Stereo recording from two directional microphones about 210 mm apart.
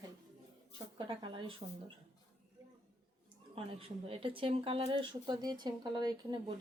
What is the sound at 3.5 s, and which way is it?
Speech, 25° right (ahead or behind).